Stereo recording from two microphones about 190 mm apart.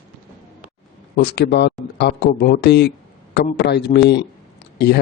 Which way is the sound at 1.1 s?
60° left (ahead or behind).